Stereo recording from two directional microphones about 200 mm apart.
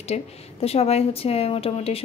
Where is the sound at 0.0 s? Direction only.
30° left (ahead or behind).